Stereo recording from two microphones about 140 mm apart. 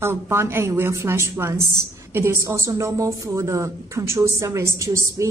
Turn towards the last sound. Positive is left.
turn(degrees=-20)  # may be behind; listen again after turning